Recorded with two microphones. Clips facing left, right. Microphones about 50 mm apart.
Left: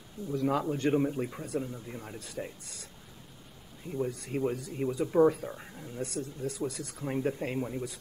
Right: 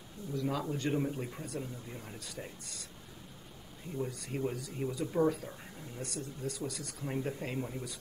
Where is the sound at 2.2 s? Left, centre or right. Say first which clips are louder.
Left 8 dB; left.